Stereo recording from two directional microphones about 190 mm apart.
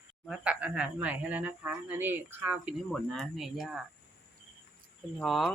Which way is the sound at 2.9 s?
Centre (ahead or behind).